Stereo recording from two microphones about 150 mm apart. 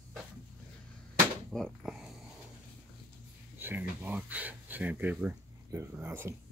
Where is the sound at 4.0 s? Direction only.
10° right (ahead or behind).